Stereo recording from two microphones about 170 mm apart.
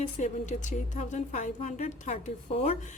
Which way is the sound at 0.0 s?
45° left (ahead or behind).